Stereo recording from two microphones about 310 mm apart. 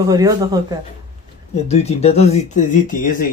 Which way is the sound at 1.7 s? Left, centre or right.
Left.